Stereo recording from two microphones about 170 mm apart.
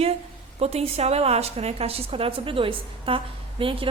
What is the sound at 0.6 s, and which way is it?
A woman's voice, 35° right (ahead or behind).